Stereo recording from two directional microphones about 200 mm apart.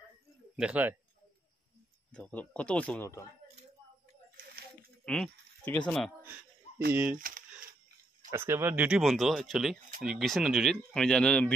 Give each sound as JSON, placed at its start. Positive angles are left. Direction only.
{"t": 0.6, "sound": "speech", "side_deg": -5}
{"t": 2.1, "sound": "speech", "side_deg": 5}
{"t": 5.0, "sound": "speech", "side_deg": 5}
{"t": 6.9, "sound": "speech", "side_deg": -10}
{"t": 7.2, "sound": "a sound", "side_deg": -45}
{"t": 8.3, "sound": "speech", "side_deg": -10}